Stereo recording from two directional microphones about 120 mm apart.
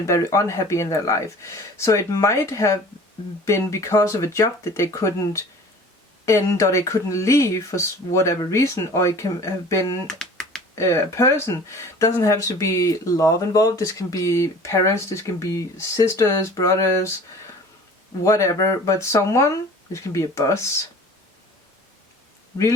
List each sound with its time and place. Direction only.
0.0 s speech: 25° left (ahead or behind)
10.1 s a sound: 5° left (ahead or behind)
10.8 s speech: 25° left (ahead or behind)
18.2 s speech: 25° left (ahead or behind)